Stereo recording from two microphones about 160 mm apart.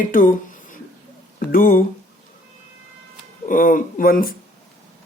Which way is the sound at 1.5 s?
65° left (ahead or behind).